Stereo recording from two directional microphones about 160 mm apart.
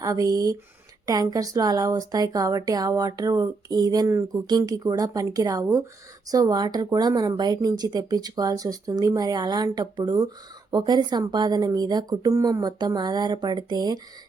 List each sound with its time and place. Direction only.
0.0 s speech: 20° right (ahead or behind)